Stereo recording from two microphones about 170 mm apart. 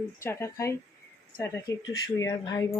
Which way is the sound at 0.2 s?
15° left (ahead or behind).